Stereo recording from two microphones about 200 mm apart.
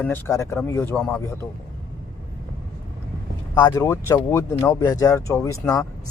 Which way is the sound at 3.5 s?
20° left (ahead or behind).